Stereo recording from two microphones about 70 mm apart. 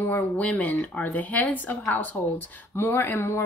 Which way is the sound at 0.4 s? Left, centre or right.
Left.